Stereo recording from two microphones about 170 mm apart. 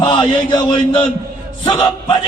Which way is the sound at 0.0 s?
25° left (ahead or behind).